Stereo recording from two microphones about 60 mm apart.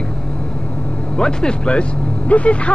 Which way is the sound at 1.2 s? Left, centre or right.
Centre.